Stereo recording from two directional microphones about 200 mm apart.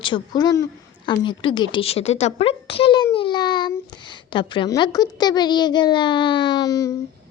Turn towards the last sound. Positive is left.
turn(degrees=15)  # may be behind; listen again after turning